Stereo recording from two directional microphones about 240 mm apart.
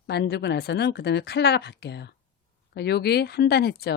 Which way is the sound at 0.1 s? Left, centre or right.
Left.